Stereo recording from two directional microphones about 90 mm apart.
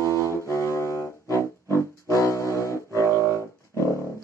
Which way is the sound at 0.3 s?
30° left (ahead or behind).